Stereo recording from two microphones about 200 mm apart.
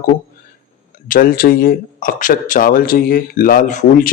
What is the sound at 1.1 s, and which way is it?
Speech, 45° left (ahead or behind).